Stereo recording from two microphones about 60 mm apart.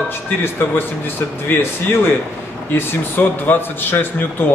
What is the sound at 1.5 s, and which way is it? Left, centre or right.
A man's voice, left.